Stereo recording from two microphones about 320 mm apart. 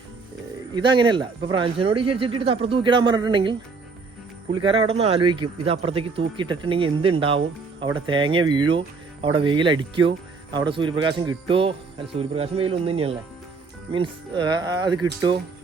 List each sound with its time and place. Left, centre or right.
0.8 s a man's voice: centre
4.5 s a man's voice: centre